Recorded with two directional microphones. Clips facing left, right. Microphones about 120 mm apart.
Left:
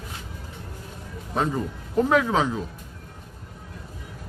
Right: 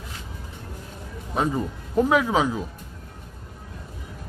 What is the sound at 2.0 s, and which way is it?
Speech, 5° right (ahead or behind).